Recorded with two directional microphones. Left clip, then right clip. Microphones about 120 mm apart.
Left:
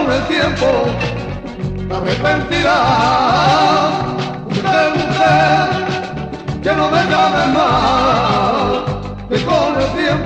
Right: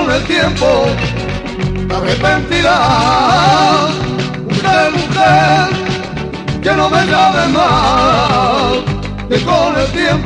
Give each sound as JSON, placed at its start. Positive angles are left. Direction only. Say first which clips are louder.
{"t": 2.0, "sound": "music", "louder": "right 3 dB", "side_deg": 25}
{"t": 6.6, "sound": "music", "louder": "right 2 dB", "side_deg": 25}